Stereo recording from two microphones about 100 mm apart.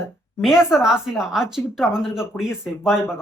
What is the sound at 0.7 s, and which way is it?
A woman's voice, 5° right (ahead or behind).